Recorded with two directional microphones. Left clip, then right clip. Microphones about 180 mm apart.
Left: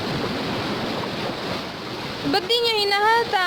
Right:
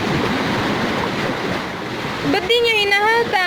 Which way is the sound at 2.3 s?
20° left (ahead or behind).